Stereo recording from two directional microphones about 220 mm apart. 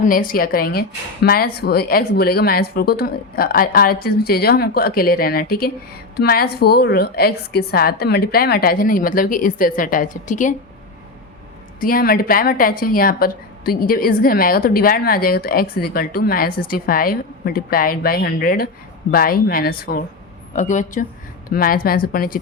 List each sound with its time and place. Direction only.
0.0 s a woman's voice: 40° left (ahead or behind)
11.8 s a woman's voice: 40° left (ahead or behind)